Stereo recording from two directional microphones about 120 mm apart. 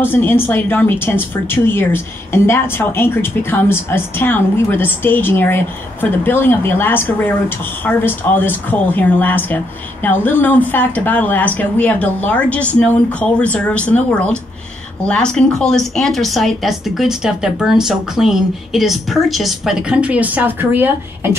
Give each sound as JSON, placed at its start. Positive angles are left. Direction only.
{"t": 0.0, "sound": "a woman's voice", "side_deg": 20}